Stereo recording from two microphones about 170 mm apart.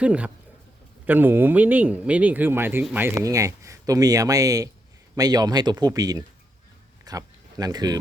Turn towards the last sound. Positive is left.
turn(degrees=-25)  # may be behind; listen again after turning